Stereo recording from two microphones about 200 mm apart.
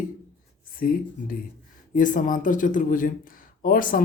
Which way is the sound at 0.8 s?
45° left (ahead or behind).